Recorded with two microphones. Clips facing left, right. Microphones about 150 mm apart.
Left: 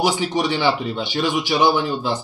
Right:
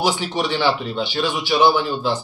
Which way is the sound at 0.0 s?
10° left (ahead or behind).